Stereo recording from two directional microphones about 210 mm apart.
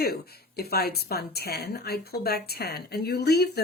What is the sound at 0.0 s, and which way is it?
Speech, 50° left (ahead or behind).